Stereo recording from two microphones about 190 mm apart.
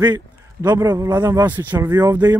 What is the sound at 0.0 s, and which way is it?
A man's voice, 20° right (ahead or behind).